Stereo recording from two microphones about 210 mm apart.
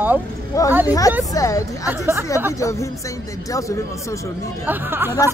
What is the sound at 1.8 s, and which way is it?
Speech, 15° right (ahead or behind).